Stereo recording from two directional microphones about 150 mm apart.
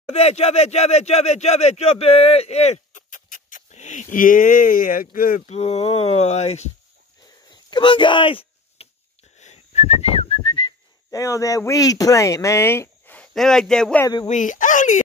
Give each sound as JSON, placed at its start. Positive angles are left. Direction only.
{"t": 0.1, "sound": "speech", "side_deg": 45}
{"t": 5.5, "sound": "speech", "side_deg": 45}
{"t": 7.7, "sound": "speech", "side_deg": 35}
{"t": 9.4, "sound": "whistling", "side_deg": 45}
{"t": 11.1, "sound": "speech", "side_deg": 20}
{"t": 14.2, "sound": "speech", "side_deg": 55}